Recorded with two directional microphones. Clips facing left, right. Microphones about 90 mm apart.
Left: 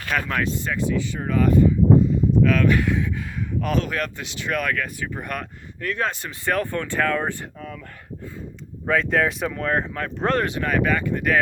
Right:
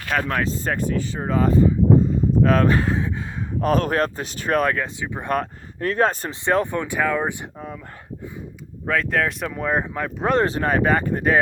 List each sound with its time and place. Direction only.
0.1 s speech: 35° right (ahead or behind)
0.7 s speech: 45° right (ahead or behind)
1.1 s speech: 30° right (ahead or behind)
5.3 s speech: 35° right (ahead or behind)
6.4 s speech: 20° right (ahead or behind)
8.9 s speech: centre (ahead or behind)
9.5 s speech: 10° right (ahead or behind)
10.4 s speech: 35° right (ahead or behind)